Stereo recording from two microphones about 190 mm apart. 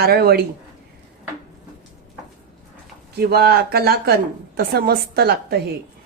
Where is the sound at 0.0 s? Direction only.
55° right (ahead or behind).